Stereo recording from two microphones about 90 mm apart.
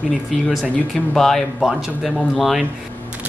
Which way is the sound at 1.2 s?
5° left (ahead or behind).